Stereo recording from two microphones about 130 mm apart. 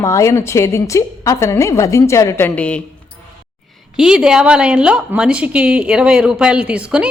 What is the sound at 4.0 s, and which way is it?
A woman's voice, 5° right (ahead or behind).